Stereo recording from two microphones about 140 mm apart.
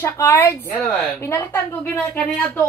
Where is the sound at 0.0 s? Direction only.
15° left (ahead or behind).